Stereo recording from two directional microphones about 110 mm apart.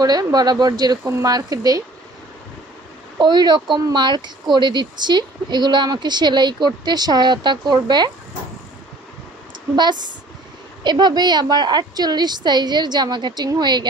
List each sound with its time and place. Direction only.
0.0 s speech: 35° right (ahead or behind)
3.2 s speech: 40° right (ahead or behind)
9.8 s speech: 40° right (ahead or behind)